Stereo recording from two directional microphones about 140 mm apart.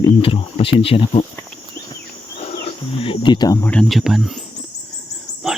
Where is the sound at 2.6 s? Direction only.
40° left (ahead or behind).